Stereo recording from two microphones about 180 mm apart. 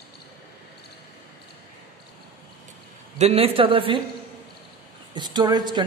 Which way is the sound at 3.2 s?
35° right (ahead or behind).